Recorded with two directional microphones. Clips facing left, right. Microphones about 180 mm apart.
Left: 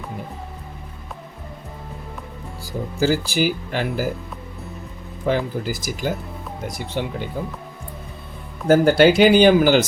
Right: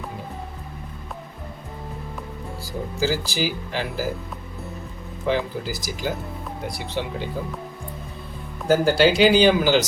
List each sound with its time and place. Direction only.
3.0 s speech: 55° left (ahead or behind)
5.2 s speech: 50° left (ahead or behind)
8.6 s speech: 55° left (ahead or behind)